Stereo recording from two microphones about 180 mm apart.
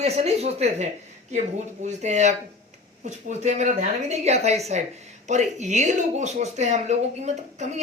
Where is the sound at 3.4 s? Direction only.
40° right (ahead or behind).